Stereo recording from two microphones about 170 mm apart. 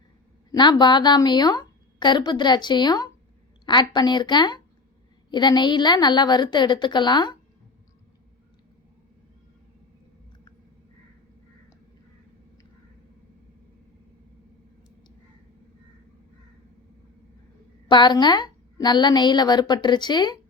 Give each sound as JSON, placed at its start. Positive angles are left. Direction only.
{"t": 0.5, "sound": "a woman's voice", "side_deg": 25}
{"t": 17.8, "sound": "a woman's voice", "side_deg": 25}